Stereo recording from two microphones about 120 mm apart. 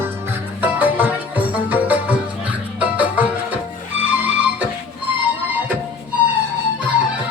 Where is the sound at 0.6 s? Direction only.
15° right (ahead or behind).